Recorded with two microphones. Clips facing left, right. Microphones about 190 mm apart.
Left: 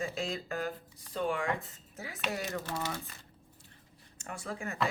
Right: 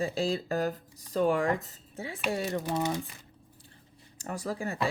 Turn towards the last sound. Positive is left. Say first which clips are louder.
# right 6 dB
turn(degrees=-35)  # may be behind; listen again after turning